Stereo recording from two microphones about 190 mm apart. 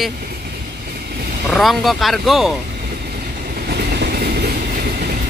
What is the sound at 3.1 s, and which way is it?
Train, 55° right (ahead or behind).